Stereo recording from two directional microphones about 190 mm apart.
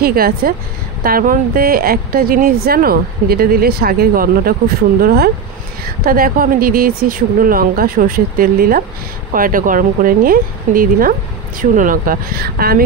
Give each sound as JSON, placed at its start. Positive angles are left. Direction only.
{"t": 0.0, "sound": "speech", "side_deg": -50}